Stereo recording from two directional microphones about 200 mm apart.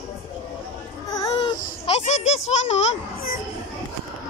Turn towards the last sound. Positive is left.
turn(degrees=35)  # may be behind; listen again after turning